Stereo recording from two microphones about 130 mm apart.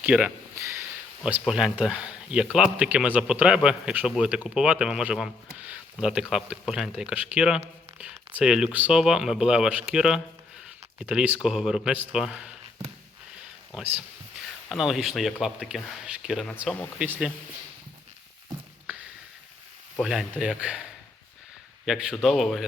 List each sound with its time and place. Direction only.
0.0 s speech: 10° right (ahead or behind)
0.5 s a sound: 20° right (ahead or behind)
1.2 s speech: 5° right (ahead or behind)
14.7 s speech: centre (ahead or behind)
17.0 s speech: 5° right (ahead or behind)
20.0 s speech: 5° right (ahead or behind)
21.8 s speech: centre (ahead or behind)